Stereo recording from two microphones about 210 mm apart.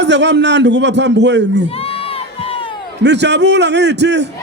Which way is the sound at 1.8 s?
25° left (ahead or behind).